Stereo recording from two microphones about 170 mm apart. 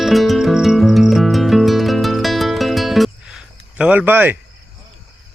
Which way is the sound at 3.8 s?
10° right (ahead or behind).